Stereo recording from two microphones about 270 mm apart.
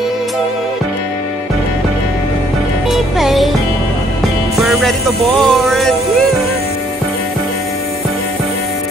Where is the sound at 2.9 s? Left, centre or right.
Centre.